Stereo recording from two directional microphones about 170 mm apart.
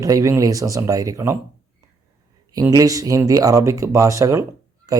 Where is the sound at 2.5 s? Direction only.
20° right (ahead or behind).